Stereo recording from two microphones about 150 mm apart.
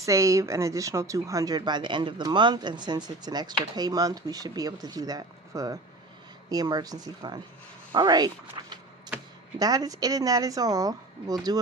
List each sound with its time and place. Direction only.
0.0 s speech: 20° right (ahead or behind)